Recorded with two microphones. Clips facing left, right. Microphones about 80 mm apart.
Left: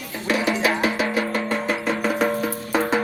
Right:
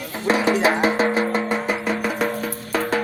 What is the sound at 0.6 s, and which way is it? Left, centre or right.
Music, right.